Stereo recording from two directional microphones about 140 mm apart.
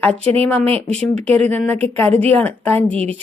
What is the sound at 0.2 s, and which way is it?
Speech, 45° right (ahead or behind).